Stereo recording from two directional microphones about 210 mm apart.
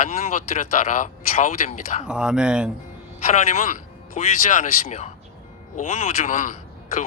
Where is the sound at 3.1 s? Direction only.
35° left (ahead or behind).